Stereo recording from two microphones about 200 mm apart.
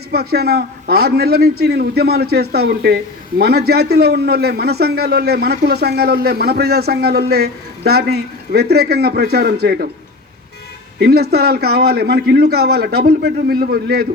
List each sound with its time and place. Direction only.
0.1 s a man's voice: 50° right (ahead or behind)
11.0 s a man's voice: 55° right (ahead or behind)